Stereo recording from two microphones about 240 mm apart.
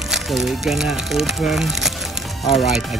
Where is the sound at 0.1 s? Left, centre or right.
Centre.